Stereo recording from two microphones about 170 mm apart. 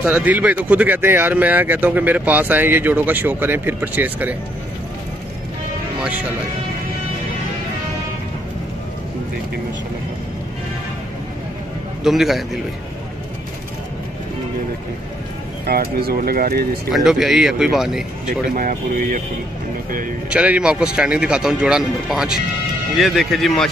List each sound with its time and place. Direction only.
0.0 s speech: 10° right (ahead or behind)
5.9 s music: 5° right (ahead or behind)
12.0 s speech: centre (ahead or behind)
15.6 s speech: 65° right (ahead or behind)
16.9 s speech: centre (ahead or behind)
18.5 s speech: 55° right (ahead or behind)
20.2 s speech: 5° right (ahead or behind)